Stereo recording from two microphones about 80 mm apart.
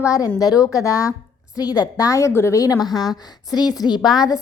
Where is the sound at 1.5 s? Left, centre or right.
Left.